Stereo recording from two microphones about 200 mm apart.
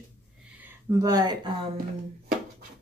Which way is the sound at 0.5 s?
15° right (ahead or behind).